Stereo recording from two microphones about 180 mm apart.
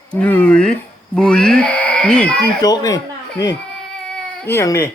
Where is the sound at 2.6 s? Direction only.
20° left (ahead or behind).